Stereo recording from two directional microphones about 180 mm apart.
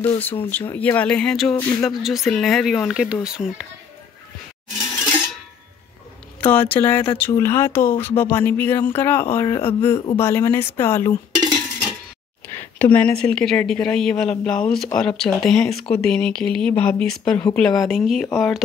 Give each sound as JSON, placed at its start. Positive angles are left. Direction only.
{"t": 0.2, "sound": "speech", "side_deg": 10}
{"t": 1.6, "sound": "speech", "side_deg": 15}
{"t": 1.9, "sound": "speech", "side_deg": 0}
{"t": 6.4, "sound": "speech", "side_deg": 10}
{"t": 11.3, "sound": "dishes", "side_deg": -25}
{"t": 12.7, "sound": "speech", "side_deg": 10}